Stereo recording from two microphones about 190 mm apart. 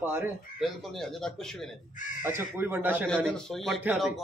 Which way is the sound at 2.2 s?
10° right (ahead or behind).